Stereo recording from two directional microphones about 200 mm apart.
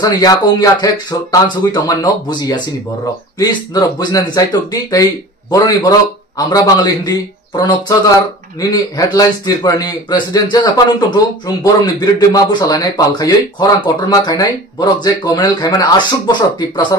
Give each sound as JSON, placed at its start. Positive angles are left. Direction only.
{"t": 0.0, "sound": "a man's voice", "side_deg": 20}